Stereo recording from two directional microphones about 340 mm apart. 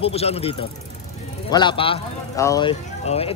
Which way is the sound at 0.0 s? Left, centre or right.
Centre.